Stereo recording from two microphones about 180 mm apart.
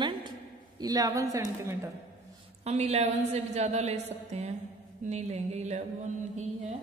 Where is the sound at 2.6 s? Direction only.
35° right (ahead or behind).